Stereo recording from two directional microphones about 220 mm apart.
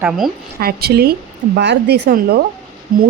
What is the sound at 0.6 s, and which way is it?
Speech, 45° right (ahead or behind).